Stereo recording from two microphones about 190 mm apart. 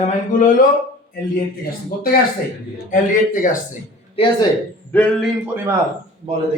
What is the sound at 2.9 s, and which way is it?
Speech, 45° left (ahead or behind).